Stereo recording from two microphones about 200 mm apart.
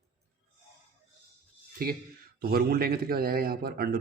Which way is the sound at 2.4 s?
50° right (ahead or behind).